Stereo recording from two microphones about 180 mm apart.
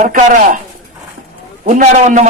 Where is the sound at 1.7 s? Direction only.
45° right (ahead or behind).